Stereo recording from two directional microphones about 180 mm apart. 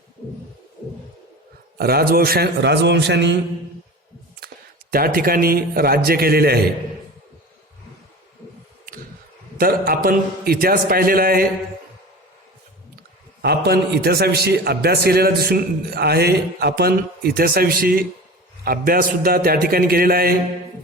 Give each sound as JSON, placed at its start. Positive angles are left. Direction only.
{"t": 1.8, "sound": "a man's voice", "side_deg": -60}
{"t": 4.4, "sound": "a man's voice", "side_deg": -60}
{"t": 9.6, "sound": "a man's voice", "side_deg": -55}
{"t": 13.4, "sound": "a man's voice", "side_deg": -60}